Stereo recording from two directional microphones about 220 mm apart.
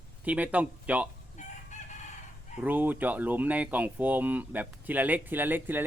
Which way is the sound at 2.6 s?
10° right (ahead or behind).